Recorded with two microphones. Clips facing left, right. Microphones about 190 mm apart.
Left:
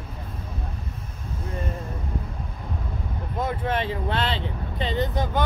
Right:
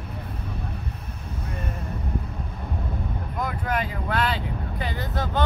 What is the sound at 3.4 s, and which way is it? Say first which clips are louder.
Speech: left 2 dB; 25° left (ahead or behind).